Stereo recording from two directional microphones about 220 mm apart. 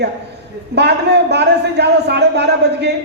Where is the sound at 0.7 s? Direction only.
50° right (ahead or behind).